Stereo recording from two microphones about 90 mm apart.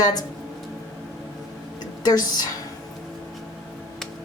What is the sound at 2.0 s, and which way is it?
Speech, 45° left (ahead or behind).